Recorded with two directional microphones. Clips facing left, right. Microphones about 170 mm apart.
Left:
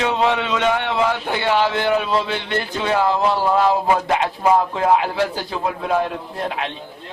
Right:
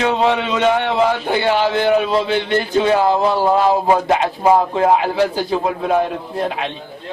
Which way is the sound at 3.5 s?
30° right (ahead or behind).